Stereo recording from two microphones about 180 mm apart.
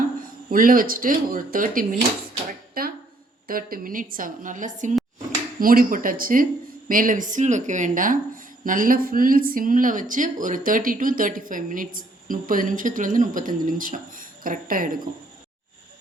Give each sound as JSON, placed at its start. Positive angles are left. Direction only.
{"t": 0.2, "sound": "a woman's voice", "side_deg": -50}